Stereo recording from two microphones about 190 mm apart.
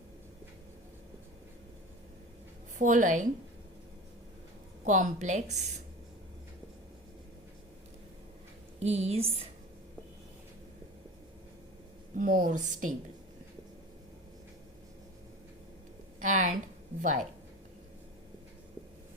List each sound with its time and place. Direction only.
2.7 s speech: 40° right (ahead or behind)
4.9 s speech: 40° right (ahead or behind)
8.8 s speech: 35° right (ahead or behind)
12.1 s a woman's voice: 45° right (ahead or behind)
16.2 s speech: 40° right (ahead or behind)